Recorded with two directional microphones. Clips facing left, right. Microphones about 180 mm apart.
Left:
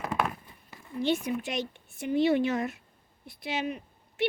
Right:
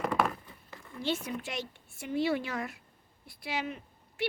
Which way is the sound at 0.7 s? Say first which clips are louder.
Left 5 dB; 15° left (ahead or behind).